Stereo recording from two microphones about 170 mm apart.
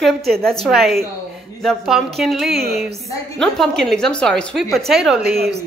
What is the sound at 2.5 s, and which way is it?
Speech, 65° right (ahead or behind).